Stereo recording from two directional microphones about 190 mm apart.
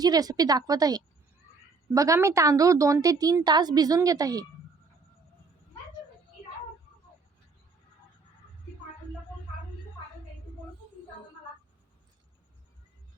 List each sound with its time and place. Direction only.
0.0 s a woman's voice: 20° right (ahead or behind)